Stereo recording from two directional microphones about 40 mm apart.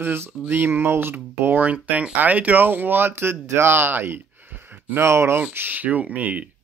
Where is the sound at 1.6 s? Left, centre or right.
Right.